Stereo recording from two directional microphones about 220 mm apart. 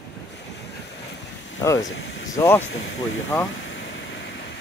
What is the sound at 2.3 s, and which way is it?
Speech, 10° left (ahead or behind).